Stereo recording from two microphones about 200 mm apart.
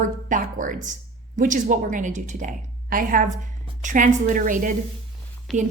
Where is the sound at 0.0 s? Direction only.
40° right (ahead or behind).